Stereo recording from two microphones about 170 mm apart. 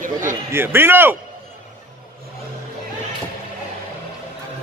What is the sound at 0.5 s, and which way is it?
Speech, 15° right (ahead or behind).